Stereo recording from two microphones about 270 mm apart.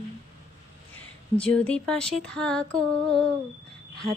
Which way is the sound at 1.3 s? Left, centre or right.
Centre.